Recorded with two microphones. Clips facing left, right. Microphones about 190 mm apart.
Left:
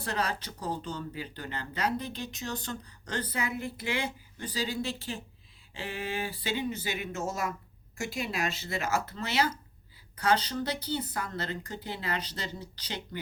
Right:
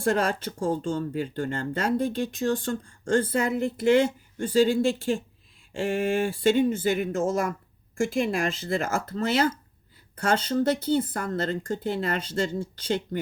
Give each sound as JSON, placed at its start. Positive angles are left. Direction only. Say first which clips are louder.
{"t": 0.0, "sound": "speech", "louder": "right 9 dB", "side_deg": -50}
{"t": 4.6, "sound": "speech", "louder": "right 10 dB", "side_deg": -50}